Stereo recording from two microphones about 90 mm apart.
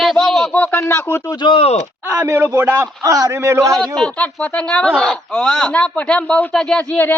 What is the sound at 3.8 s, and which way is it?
Speech, 10° left (ahead or behind).